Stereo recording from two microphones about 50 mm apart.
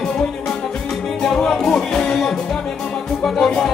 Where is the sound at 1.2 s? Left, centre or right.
Centre.